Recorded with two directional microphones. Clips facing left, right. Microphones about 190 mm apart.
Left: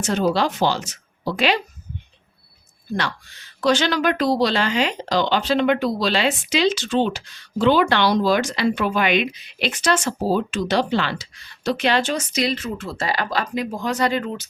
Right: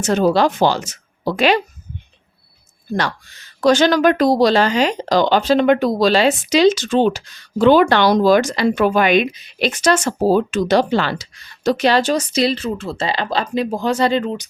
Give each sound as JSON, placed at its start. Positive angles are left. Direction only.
{"t": 0.0, "sound": "speech", "side_deg": -45}
{"t": 3.6, "sound": "speech", "side_deg": -45}